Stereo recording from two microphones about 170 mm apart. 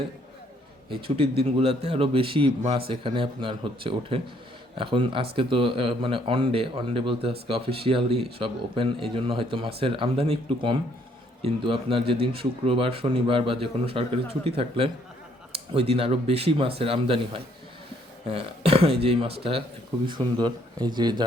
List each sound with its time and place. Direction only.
0.9 s a man's voice: 35° right (ahead or behind)
18.3 s a man's voice: 35° right (ahead or behind)